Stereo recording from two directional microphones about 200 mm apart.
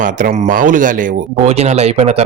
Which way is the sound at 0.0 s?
40° right (ahead or behind).